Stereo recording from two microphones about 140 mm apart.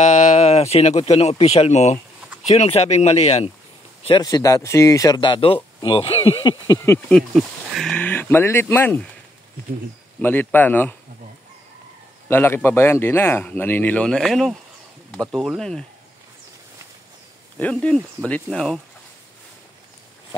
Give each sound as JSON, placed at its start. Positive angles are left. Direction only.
{"t": 0.0, "sound": "speech", "side_deg": 60}
{"t": 4.1, "sound": "speech", "side_deg": 25}
{"t": 7.1, "sound": "speech", "side_deg": 0}
{"t": 10.2, "sound": "speech", "side_deg": 15}
{"t": 12.3, "sound": "speech", "side_deg": 15}
{"t": 17.6, "sound": "speech", "side_deg": 10}